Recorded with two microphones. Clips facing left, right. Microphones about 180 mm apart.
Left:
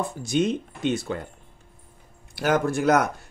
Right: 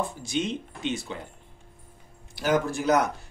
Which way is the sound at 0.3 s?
45° left (ahead or behind).